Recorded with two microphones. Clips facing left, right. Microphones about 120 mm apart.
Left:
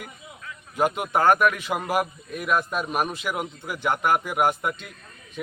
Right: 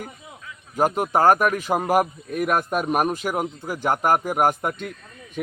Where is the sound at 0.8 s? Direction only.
40° right (ahead or behind).